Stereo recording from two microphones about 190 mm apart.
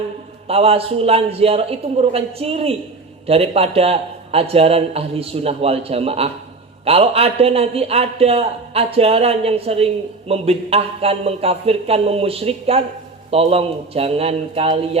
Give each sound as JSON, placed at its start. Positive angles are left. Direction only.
{"t": 0.4, "sound": "a man's voice", "side_deg": -30}